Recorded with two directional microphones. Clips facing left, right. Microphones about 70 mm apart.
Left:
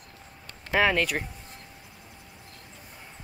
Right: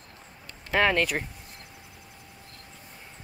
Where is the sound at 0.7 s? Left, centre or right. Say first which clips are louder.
Even; centre.